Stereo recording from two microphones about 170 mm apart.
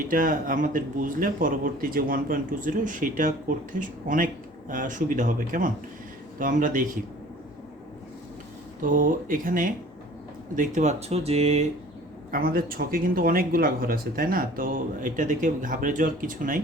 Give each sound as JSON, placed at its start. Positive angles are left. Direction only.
{"t": 0.1, "sound": "speech", "side_deg": -55}
{"t": 8.8, "sound": "speech", "side_deg": -50}
{"t": 12.3, "sound": "speech", "side_deg": -60}